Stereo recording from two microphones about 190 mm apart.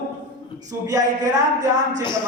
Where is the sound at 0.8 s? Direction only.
20° right (ahead or behind).